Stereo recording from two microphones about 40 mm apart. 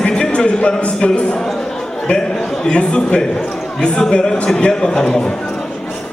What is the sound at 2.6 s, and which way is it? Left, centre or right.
A man's voice, left.